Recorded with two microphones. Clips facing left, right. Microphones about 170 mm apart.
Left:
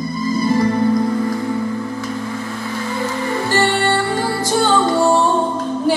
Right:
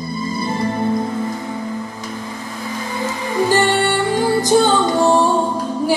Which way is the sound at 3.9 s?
20° right (ahead or behind).